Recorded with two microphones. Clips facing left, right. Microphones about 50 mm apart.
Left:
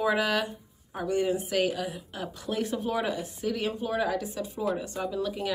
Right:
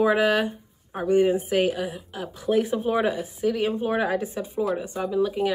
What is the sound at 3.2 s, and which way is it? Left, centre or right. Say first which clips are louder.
Speech: right 6 dB; centre.